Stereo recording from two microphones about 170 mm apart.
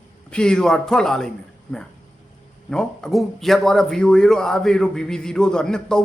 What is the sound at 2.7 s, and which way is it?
A man's voice, 5° left (ahead or behind).